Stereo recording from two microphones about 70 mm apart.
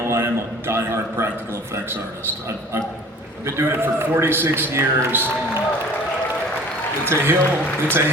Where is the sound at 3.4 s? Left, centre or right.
Right.